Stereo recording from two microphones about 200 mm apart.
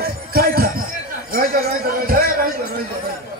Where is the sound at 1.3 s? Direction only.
45° right (ahead or behind).